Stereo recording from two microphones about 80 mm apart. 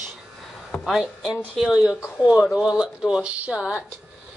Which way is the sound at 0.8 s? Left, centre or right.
Centre.